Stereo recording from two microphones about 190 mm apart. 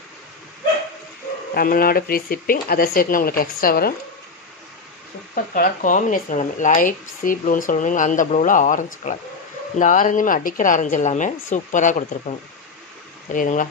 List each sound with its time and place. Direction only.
1.5 s speech: 50° left (ahead or behind)
5.3 s speech: 45° left (ahead or behind)